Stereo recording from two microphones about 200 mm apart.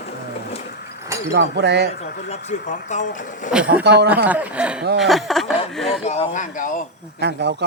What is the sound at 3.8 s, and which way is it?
Speech, 60° right (ahead or behind).